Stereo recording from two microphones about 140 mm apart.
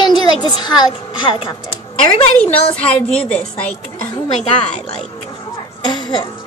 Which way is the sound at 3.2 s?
10° left (ahead or behind).